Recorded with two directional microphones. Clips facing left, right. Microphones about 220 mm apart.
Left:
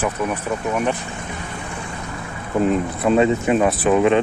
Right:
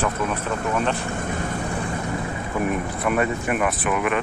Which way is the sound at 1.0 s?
50° right (ahead or behind).